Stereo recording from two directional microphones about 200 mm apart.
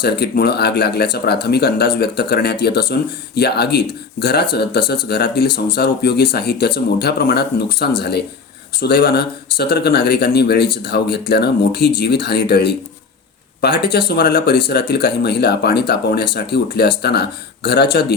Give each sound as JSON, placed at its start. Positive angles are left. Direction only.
{"t": 0.0, "sound": "speech", "side_deg": 55}